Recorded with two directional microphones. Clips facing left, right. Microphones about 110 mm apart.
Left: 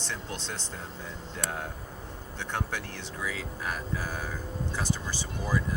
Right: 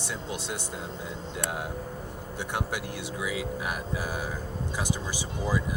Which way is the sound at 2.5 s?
10° right (ahead or behind).